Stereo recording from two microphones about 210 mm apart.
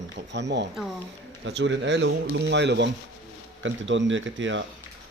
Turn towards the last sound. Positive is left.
turn(degrees=-60)  # may be behind; listen again after turning